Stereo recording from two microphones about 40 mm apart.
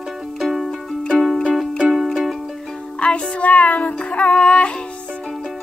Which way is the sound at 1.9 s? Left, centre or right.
Centre.